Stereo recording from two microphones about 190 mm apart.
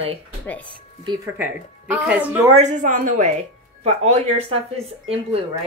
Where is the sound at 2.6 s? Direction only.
40° right (ahead or behind).